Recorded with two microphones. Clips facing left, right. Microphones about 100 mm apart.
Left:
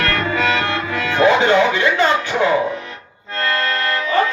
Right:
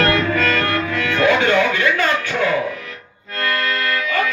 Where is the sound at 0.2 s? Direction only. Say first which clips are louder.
Even; 15° left (ahead or behind).